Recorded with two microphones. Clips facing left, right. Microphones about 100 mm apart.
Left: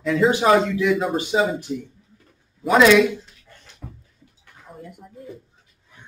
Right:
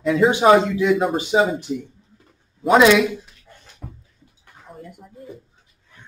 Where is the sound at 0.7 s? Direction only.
20° right (ahead or behind).